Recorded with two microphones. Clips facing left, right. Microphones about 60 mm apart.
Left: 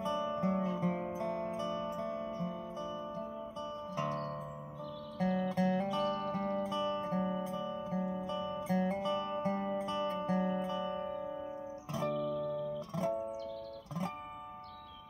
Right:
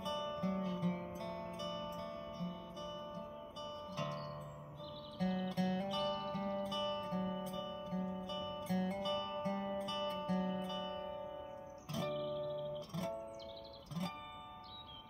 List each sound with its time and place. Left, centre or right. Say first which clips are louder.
0.0 s music: left 6 dB; left